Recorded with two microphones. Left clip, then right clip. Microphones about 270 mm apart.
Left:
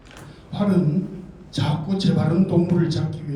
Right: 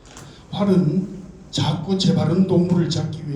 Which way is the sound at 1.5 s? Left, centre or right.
Centre.